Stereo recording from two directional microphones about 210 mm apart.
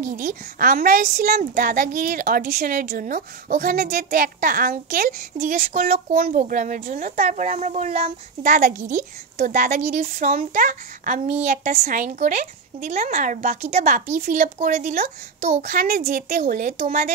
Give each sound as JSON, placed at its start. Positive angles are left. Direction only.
{"t": 0.0, "sound": "a woman's voice", "side_deg": -40}